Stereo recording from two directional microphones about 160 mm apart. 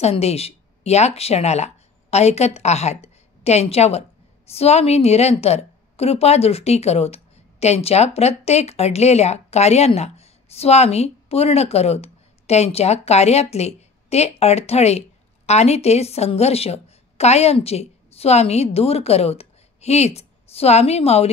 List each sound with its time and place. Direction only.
0.0 s a woman's voice: 40° left (ahead or behind)